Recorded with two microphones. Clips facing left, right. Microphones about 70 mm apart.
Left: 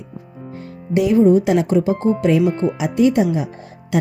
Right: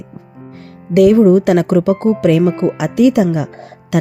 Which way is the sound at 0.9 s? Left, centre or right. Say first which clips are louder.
Right 5 dB; right.